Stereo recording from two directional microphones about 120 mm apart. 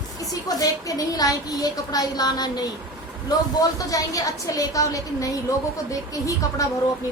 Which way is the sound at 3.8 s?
30° left (ahead or behind).